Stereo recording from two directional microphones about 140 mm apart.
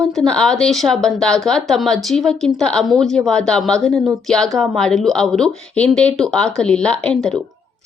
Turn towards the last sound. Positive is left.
turn(degrees=5)  # may be behind; listen again after turning